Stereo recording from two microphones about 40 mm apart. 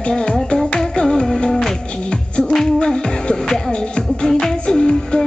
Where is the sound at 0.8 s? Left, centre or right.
Centre.